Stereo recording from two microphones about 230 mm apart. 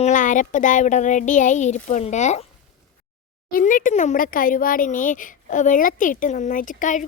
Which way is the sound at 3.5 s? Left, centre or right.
Left.